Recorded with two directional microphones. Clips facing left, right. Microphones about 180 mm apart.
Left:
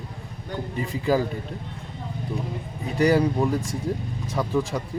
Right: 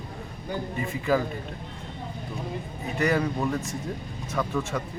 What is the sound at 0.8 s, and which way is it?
Speech, 35° left (ahead or behind).